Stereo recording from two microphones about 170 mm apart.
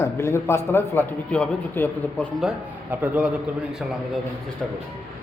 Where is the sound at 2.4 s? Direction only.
10° right (ahead or behind).